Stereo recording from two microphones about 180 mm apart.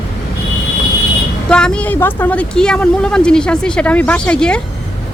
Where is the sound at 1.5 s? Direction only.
5° left (ahead or behind).